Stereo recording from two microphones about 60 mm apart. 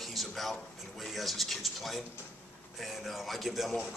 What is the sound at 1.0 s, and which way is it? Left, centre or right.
A man's voice, centre.